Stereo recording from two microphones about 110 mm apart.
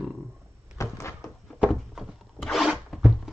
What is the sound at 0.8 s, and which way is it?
Door, 25° left (ahead or behind).